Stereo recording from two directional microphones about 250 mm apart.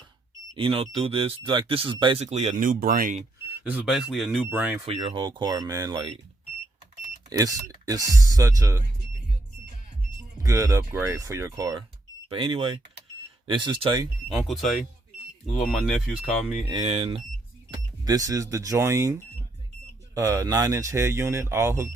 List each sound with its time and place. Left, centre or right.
0.5 s speech: right
3.6 s speech: centre
4.9 s speech: centre
7.3 s speech: centre
10.4 s speech: centre
14.4 s speech: centre
16.6 s speech: right